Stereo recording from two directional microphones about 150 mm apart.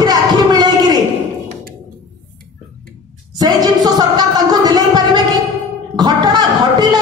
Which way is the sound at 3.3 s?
25° right (ahead or behind).